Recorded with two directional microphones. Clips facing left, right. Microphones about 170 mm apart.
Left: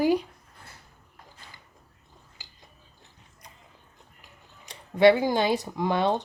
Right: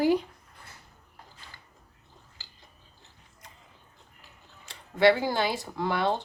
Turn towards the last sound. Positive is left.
turn(degrees=15)  # may be behind; listen again after turning